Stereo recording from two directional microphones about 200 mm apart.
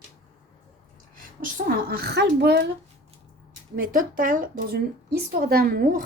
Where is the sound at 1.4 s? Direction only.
50° right (ahead or behind).